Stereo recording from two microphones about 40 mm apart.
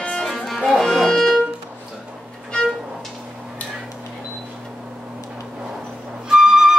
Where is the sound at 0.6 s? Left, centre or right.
Centre.